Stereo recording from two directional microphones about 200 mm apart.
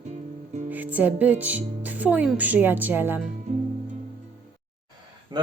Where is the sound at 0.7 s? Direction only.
10° right (ahead or behind).